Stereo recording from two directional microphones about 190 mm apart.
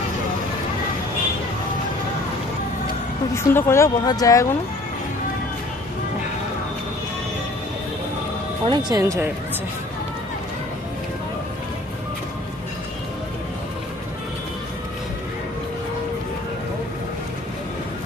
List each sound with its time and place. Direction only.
3.3 s speech: 15° left (ahead or behind)
8.6 s speech: 25° right (ahead or behind)